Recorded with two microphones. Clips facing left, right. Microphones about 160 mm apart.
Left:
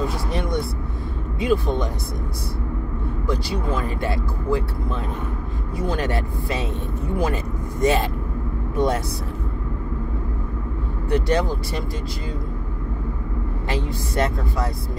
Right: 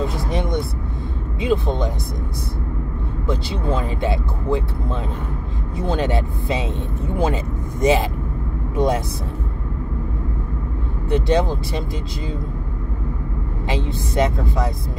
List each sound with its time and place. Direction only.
0.0 s vehicle: 20° right (ahead or behind)
1.4 s speech: 20° right (ahead or behind)
3.3 s speech: 25° right (ahead or behind)
5.8 s speech: 25° right (ahead or behind)
7.8 s speech: 15° right (ahead or behind)
11.1 s speech: 20° right (ahead or behind)
13.7 s speech: 20° right (ahead or behind)